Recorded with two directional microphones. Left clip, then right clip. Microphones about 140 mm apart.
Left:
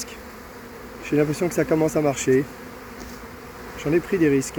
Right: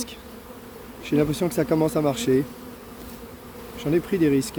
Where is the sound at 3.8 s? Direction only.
5° right (ahead or behind).